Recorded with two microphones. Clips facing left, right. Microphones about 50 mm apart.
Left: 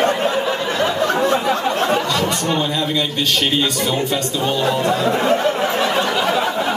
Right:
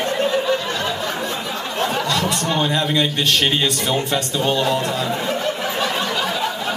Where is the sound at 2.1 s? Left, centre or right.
Centre.